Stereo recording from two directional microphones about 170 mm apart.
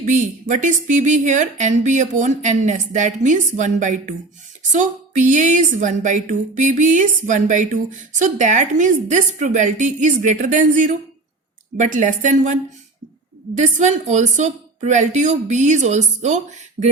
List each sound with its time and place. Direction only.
0.0 s a woman's voice: 45° right (ahead or behind)
13.6 s a woman's voice: 45° right (ahead or behind)